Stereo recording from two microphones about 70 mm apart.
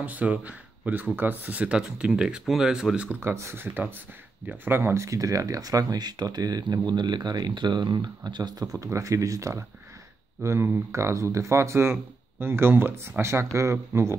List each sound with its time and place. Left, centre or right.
0.0 s speech: right
3.2 s speech: right
8.7 s speech: right